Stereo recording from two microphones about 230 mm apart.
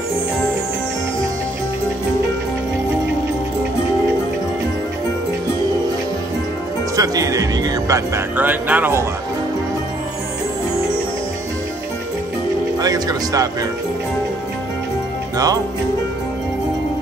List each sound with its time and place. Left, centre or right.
7.0 s speech: centre
12.7 s music: centre
15.3 s music: centre